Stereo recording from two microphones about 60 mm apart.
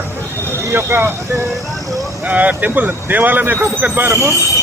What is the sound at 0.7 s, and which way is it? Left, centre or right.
Speech, right.